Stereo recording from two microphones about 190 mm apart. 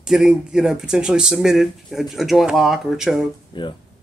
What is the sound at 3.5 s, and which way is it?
Speech, 25° left (ahead or behind).